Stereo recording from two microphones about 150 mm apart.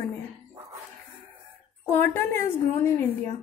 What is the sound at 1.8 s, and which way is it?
A woman's voice, 15° left (ahead or behind).